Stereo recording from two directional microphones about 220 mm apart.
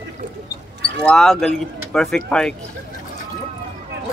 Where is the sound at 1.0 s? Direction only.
Centre (ahead or behind).